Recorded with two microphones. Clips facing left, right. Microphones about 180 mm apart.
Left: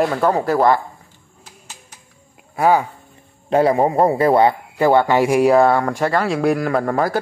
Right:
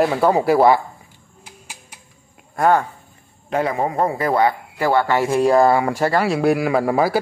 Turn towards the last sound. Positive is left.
turn(degrees=-10)  # may be behind; listen again after turning